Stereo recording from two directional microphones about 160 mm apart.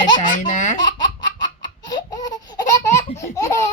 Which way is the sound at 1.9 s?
25° left (ahead or behind).